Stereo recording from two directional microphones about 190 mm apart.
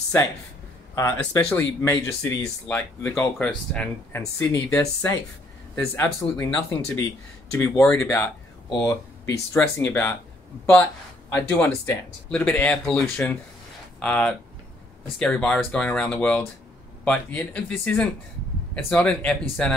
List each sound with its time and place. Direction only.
0.9 s speech: 15° left (ahead or behind)
11.3 s speech: 10° left (ahead or behind)